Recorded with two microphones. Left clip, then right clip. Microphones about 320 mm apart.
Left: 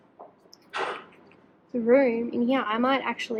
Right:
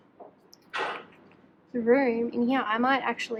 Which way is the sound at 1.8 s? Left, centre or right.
Centre.